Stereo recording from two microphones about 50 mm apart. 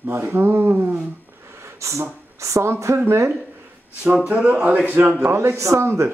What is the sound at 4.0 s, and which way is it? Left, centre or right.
Speech, right.